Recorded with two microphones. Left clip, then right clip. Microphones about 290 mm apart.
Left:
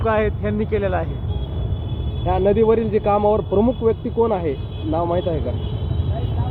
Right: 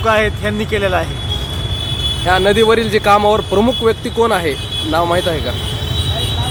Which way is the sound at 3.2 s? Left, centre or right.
Right.